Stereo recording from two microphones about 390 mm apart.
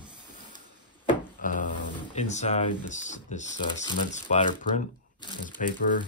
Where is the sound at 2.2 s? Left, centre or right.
Centre.